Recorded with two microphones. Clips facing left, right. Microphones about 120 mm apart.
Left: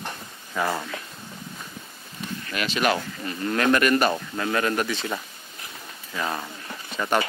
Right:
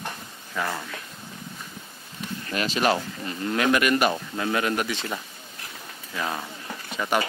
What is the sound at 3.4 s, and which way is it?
Speech, 10° right (ahead or behind).